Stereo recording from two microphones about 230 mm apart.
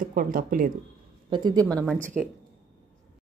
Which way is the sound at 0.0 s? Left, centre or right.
Right.